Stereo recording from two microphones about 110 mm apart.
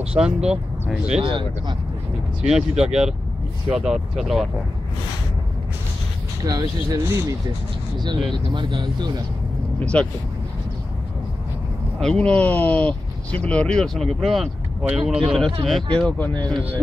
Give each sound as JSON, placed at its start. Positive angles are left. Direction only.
{"t": 0.1, "sound": "speech", "side_deg": -10}
{"t": 1.2, "sound": "speech", "side_deg": -50}
{"t": 2.4, "sound": "speech", "side_deg": -5}
{"t": 6.4, "sound": "speech", "side_deg": -35}
{"t": 8.5, "sound": "speech", "side_deg": -45}
{"t": 9.8, "sound": "speech", "side_deg": 10}
{"t": 12.0, "sound": "speech", "side_deg": 10}